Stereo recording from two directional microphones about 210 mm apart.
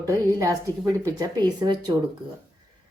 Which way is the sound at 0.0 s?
15° right (ahead or behind).